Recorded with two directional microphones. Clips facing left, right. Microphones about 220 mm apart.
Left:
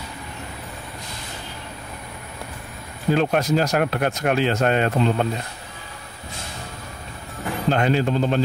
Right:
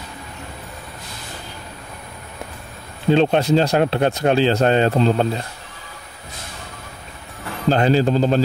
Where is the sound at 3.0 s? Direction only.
25° right (ahead or behind).